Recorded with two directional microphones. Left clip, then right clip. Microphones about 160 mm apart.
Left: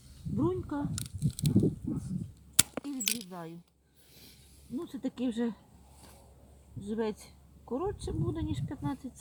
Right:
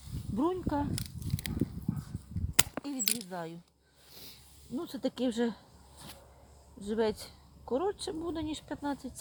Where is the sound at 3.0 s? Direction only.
30° right (ahead or behind).